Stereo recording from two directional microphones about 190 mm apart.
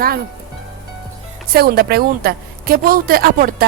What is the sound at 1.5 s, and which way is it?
A woman's voice, 55° right (ahead or behind).